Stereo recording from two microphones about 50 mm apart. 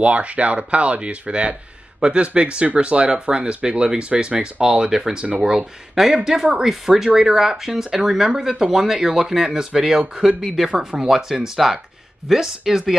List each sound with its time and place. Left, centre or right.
0.0 s speech: right; by 10.7 s centre
10.7 s speech: right
11.0 s speech: centre